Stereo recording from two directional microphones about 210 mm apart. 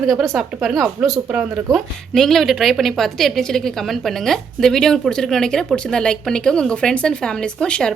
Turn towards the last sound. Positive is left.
turn(degrees=5)  # may be behind; listen again after turning